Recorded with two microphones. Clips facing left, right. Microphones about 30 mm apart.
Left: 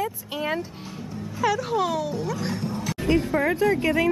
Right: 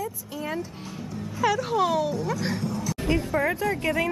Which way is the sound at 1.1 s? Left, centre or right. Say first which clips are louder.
Even; centre.